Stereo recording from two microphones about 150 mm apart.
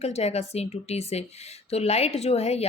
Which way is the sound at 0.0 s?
45° left (ahead or behind).